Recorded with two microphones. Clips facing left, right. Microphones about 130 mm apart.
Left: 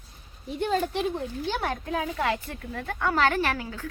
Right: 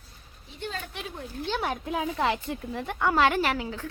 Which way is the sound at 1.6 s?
10° right (ahead or behind).